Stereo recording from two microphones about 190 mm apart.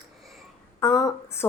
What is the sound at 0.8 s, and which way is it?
Speech, 20° left (ahead or behind).